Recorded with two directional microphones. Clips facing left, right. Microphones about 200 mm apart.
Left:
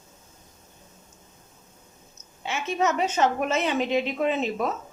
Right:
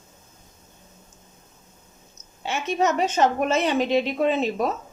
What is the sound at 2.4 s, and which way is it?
A woman's voice, 35° right (ahead or behind).